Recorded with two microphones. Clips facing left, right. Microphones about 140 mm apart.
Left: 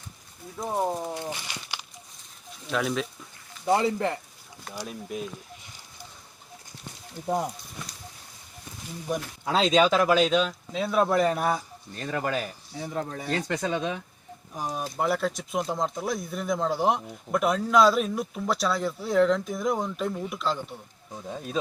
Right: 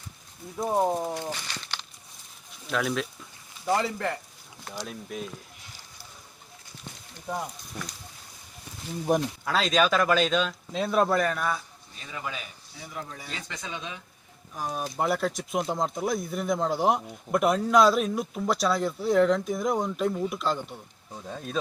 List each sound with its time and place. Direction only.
0.5 s speech: 15° right (ahead or behind)
1.3 s a sound: 10° left (ahead or behind)
2.6 s speech: centre (ahead or behind)
3.7 s speech: 20° left (ahead or behind)
4.6 s speech: 5° left (ahead or behind)
9.4 s speech: 25° left (ahead or behind)
10.7 s speech: centre (ahead or behind)
11.1 s speech: 20° left (ahead or behind)
11.3 s speech: 40° left (ahead or behind)
11.9 s speech: 55° left (ahead or behind)
12.7 s speech: 40° left (ahead or behind)
14.5 s speech: 15° left (ahead or behind)
14.9 s speech: centre (ahead or behind)
21.1 s speech: 10° left (ahead or behind)